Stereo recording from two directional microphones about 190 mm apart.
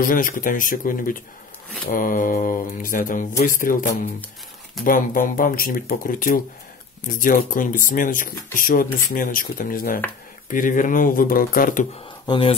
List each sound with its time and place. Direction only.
0.0 s speech: 45° left (ahead or behind)
12.3 s speech: 30° left (ahead or behind)